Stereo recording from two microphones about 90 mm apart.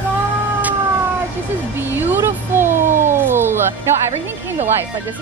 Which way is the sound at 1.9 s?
25° right (ahead or behind).